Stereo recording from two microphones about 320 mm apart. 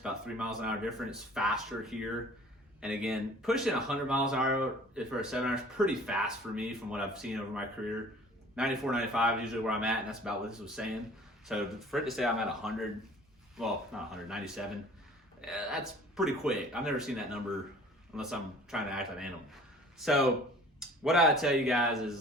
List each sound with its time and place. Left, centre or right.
0.0 s speech: centre